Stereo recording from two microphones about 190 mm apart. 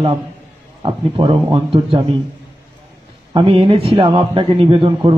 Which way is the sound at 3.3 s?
30° right (ahead or behind).